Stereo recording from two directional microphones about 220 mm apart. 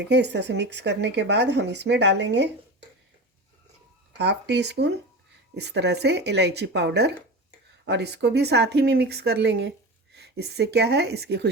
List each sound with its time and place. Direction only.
0.1 s speech: 50° right (ahead or behind)
4.2 s speech: 50° right (ahead or behind)